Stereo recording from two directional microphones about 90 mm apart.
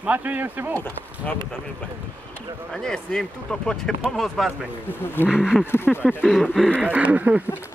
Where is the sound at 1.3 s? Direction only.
15° left (ahead or behind).